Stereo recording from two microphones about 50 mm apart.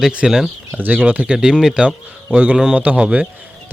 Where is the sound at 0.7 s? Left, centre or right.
Right.